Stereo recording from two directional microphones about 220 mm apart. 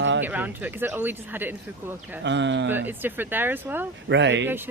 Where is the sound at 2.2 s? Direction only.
55° right (ahead or behind).